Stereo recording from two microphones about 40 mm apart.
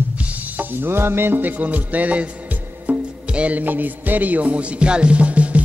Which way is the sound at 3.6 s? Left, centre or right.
Right.